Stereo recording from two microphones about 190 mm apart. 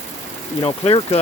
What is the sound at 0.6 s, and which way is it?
Speech, 30° left (ahead or behind).